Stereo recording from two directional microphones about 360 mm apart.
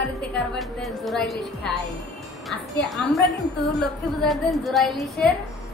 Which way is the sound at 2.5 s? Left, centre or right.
Centre.